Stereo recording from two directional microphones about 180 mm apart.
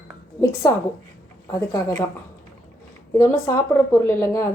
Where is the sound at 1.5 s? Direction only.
20° left (ahead or behind).